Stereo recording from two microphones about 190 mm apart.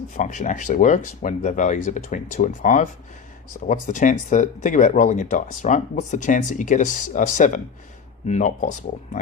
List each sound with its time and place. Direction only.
0.1 s speech: 40° left (ahead or behind)